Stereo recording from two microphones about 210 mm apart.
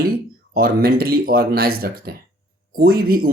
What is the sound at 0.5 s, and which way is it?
Speech, 45° right (ahead or behind).